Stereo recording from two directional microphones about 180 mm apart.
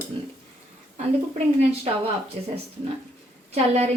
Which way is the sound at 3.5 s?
35° right (ahead or behind).